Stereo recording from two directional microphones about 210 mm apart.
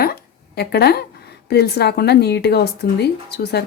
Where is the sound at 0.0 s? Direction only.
50° left (ahead or behind).